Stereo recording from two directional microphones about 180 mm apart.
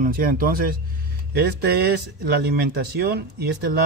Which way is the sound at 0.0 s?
50° right (ahead or behind).